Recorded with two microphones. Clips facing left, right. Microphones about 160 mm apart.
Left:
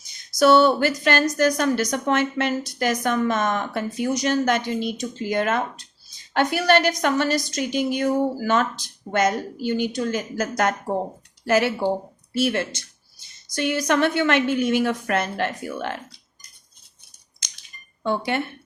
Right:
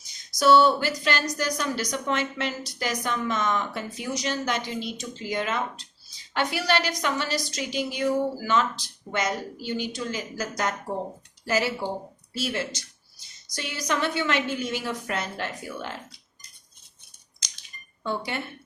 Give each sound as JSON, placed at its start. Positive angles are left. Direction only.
{"t": 0.3, "sound": "a woman's voice", "side_deg": 55}
{"t": 18.0, "sound": "a woman's voice", "side_deg": 60}